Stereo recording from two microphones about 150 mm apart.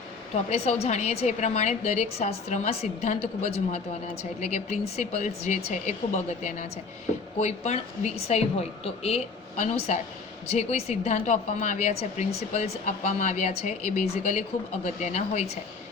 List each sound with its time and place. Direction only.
0.3 s a woman's voice: 45° left (ahead or behind)
7.3 s a woman's voice: 50° left (ahead or behind)